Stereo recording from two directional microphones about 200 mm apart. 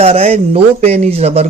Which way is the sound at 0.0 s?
30° right (ahead or behind).